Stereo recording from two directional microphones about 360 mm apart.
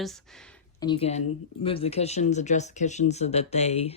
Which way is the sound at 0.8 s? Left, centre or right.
Centre.